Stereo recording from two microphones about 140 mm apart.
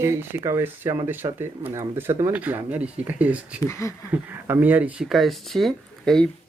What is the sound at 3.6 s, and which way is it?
Speech, 20° left (ahead or behind).